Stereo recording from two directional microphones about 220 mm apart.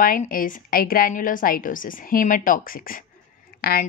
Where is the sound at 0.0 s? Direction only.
40° left (ahead or behind).